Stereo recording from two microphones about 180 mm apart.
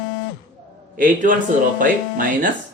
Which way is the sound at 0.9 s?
50° right (ahead or behind).